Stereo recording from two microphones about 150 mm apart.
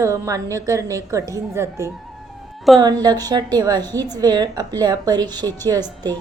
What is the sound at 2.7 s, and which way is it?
Speech, centre (ahead or behind).